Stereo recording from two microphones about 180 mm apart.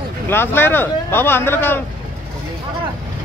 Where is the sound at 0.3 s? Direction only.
10° left (ahead or behind).